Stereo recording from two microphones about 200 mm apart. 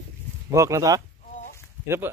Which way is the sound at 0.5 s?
15° right (ahead or behind).